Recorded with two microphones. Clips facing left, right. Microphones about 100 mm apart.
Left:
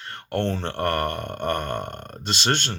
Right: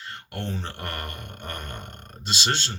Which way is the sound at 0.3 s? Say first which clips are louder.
Left 9 dB; 65° left (ahead or behind).